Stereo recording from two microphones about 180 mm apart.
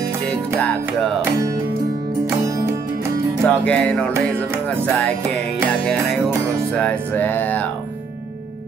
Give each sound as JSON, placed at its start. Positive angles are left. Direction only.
{"t": 0.6, "sound": "music", "side_deg": 5}
{"t": 2.2, "sound": "music", "side_deg": -20}
{"t": 3.4, "sound": "music", "side_deg": 5}
{"t": 6.7, "sound": "music", "side_deg": 5}